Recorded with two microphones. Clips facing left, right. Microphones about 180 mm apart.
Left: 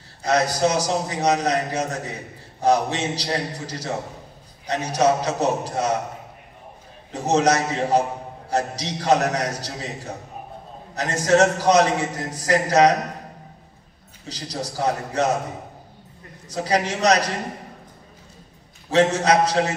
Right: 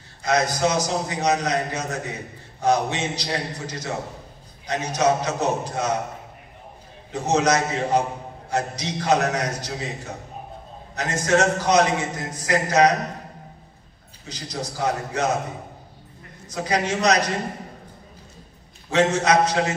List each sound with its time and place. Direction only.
0.2 s a man's voice: 35° left (ahead or behind)
7.1 s a man's voice: 35° left (ahead or behind)
11.0 s a man's voice: 35° left (ahead or behind)
14.2 s a man's voice: 35° left (ahead or behind)
16.4 s a man's voice: 35° left (ahead or behind)
18.9 s a man's voice: 35° left (ahead or behind)